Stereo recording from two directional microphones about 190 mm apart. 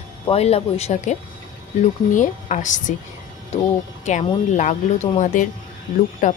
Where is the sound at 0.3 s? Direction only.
35° left (ahead or behind).